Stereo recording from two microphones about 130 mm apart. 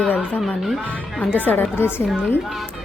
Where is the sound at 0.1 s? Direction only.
10° left (ahead or behind).